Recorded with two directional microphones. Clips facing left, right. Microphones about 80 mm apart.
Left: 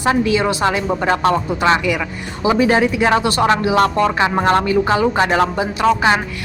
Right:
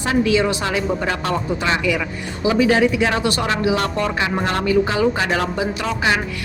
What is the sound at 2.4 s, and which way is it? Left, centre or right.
Speech, left.